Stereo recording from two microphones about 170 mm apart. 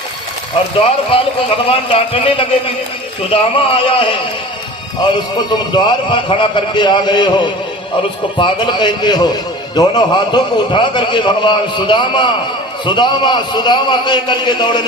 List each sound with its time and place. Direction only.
0.8 s a man's voice: 35° left (ahead or behind)